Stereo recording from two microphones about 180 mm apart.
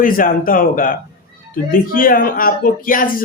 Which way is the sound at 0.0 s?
50° left (ahead or behind).